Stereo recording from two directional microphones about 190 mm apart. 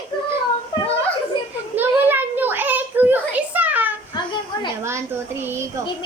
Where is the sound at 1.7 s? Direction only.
10° right (ahead or behind).